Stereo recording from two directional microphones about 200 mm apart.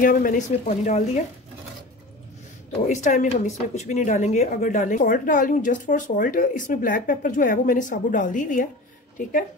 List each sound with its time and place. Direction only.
0.0 s speech: 45° left (ahead or behind)
2.9 s speech: 35° left (ahead or behind)